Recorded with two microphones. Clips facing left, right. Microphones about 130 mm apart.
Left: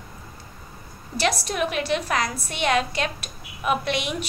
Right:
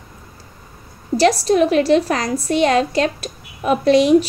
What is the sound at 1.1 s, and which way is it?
A woman's voice, 35° right (ahead or behind).